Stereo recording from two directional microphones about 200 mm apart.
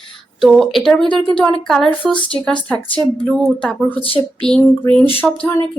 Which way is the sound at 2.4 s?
5° left (ahead or behind).